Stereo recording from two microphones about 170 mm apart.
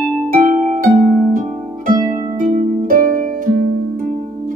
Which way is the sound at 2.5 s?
50° right (ahead or behind).